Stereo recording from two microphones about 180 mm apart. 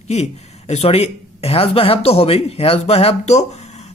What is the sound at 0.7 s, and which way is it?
Speech, 35° left (ahead or behind).